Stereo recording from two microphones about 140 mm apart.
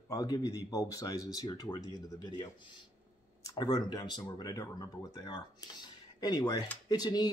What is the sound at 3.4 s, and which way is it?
A man's voice, 30° left (ahead or behind).